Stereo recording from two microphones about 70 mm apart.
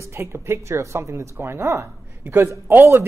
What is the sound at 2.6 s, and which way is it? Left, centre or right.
Speech, right.